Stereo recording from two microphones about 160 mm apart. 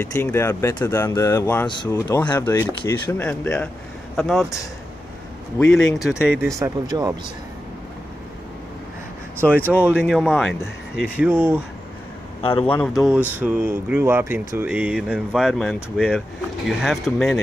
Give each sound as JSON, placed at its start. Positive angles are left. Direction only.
{"t": 0.0, "sound": "speech", "side_deg": 15}
{"t": 1.7, "sound": "speech", "side_deg": 30}
{"t": 2.0, "sound": "speech", "side_deg": 15}
{"t": 5.7, "sound": "speech", "side_deg": 5}
{"t": 6.6, "sound": "speech", "side_deg": -20}
{"t": 9.8, "sound": "speech", "side_deg": -5}
{"t": 11.0, "sound": "speech", "side_deg": -10}
{"t": 12.4, "sound": "speech", "side_deg": 35}
{"t": 13.0, "sound": "speech", "side_deg": -10}